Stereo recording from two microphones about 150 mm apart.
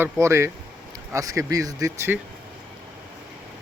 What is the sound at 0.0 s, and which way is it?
Speech, 20° right (ahead or behind).